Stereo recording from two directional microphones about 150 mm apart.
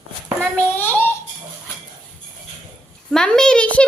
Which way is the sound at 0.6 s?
10° left (ahead or behind).